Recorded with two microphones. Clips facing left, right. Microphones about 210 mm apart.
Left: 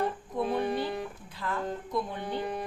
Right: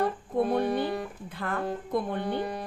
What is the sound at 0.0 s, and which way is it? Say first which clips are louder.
Music: right 4 dB; 55° right (ahead or behind).